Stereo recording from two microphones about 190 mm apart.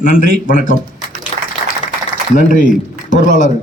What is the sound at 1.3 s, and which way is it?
Applause, 35° left (ahead or behind).